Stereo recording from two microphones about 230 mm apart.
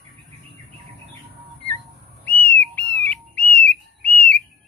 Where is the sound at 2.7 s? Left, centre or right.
Centre.